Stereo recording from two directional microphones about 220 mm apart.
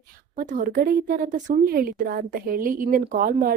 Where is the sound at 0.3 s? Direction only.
40° right (ahead or behind).